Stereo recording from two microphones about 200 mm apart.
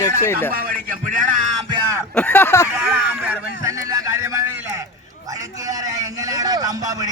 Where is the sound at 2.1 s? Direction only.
10° left (ahead or behind).